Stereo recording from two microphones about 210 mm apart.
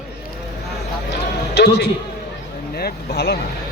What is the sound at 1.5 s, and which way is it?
Speech, 50° left (ahead or behind).